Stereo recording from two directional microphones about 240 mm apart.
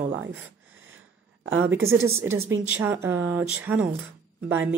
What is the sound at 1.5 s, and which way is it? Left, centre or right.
Speech, right.